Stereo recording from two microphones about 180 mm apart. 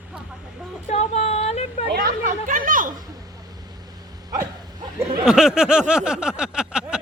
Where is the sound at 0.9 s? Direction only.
35° left (ahead or behind).